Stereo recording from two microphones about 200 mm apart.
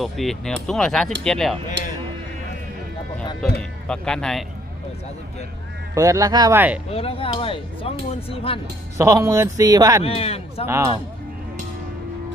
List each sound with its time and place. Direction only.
0.0 s speech: centre (ahead or behind)
1.8 s speech: 60° right (ahead or behind)
3.8 s speech: 5° left (ahead or behind)
5.9 s speech: 15° right (ahead or behind)
6.9 s speech: 30° left (ahead or behind)
9.0 s speech: 15° right (ahead or behind)
10.0 s speech: 30° left (ahead or behind)